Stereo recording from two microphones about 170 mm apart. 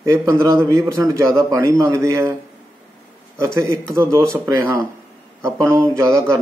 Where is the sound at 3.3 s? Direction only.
15° right (ahead or behind).